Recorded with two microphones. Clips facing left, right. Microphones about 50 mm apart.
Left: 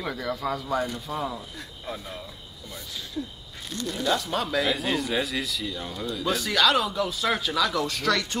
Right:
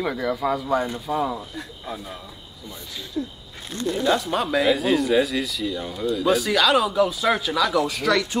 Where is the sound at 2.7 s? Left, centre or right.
Right.